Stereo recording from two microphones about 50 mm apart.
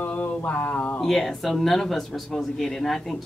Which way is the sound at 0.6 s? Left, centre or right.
Left.